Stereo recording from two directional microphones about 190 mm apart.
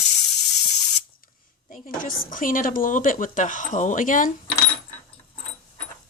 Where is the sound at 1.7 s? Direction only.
45° left (ahead or behind).